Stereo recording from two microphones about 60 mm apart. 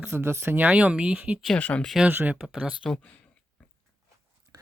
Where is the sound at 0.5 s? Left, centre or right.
Right.